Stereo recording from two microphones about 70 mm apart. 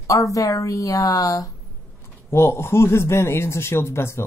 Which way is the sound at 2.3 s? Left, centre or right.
Left.